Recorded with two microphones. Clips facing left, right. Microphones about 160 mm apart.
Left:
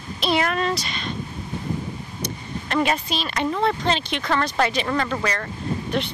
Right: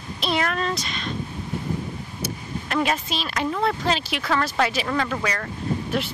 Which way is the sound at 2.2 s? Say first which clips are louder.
Right 1 dB; centre (ahead or behind).